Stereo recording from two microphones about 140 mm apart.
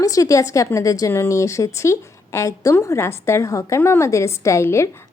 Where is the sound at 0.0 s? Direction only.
25° left (ahead or behind).